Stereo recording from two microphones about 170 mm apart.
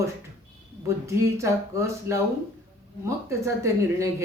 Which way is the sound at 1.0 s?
15° right (ahead or behind).